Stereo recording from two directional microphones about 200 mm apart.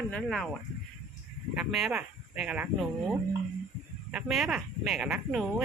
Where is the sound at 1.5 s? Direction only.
Centre (ahead or behind).